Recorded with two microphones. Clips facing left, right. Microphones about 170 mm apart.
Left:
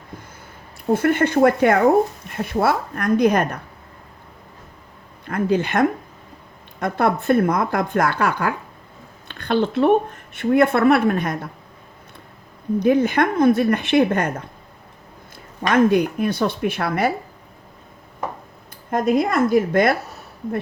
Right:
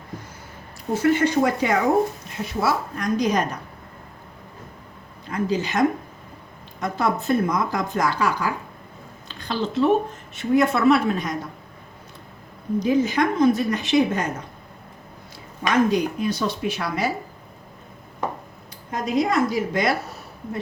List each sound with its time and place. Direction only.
0.9 s speech: 55° left (ahead or behind)
5.2 s speech: 55° left (ahead or behind)
12.8 s speech: 60° left (ahead or behind)
15.7 s speech: 55° left (ahead or behind)
18.9 s a woman's voice: 55° left (ahead or behind)